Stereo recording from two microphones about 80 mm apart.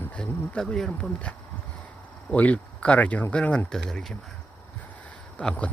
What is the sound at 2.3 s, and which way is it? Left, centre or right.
Speech, centre.